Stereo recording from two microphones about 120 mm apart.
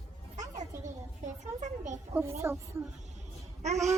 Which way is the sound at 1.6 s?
90° right.